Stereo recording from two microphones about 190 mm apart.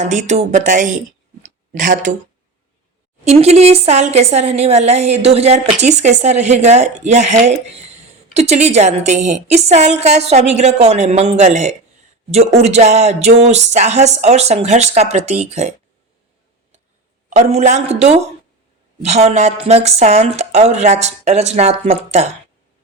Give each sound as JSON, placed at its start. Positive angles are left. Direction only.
{"t": 0.0, "sound": "a woman's voice", "side_deg": -40}
{"t": 1.4, "sound": "a sound", "side_deg": -40}
{"t": 3.2, "sound": "a woman's voice", "side_deg": -35}
{"t": 17.2, "sound": "a woman's voice", "side_deg": -35}